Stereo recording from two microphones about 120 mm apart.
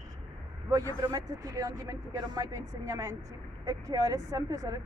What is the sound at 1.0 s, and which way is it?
Speech, 30° right (ahead or behind).